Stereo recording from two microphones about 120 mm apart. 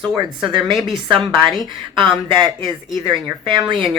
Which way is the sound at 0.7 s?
Centre (ahead or behind).